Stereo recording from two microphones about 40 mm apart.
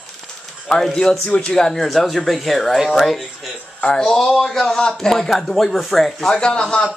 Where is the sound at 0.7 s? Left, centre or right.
Centre.